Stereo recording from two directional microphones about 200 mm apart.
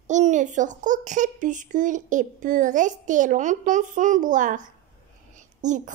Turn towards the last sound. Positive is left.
turn(degrees=-40)  # may be behind; listen again after turning